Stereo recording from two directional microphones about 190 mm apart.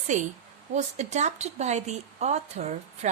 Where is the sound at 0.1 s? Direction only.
40° right (ahead or behind).